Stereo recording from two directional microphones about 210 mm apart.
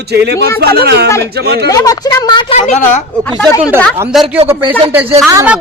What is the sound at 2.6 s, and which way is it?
Speech, 35° left (ahead or behind).